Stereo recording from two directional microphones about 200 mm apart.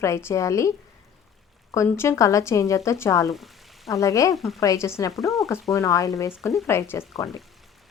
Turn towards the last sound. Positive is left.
turn(degrees=0)  # may be behind; listen again after turning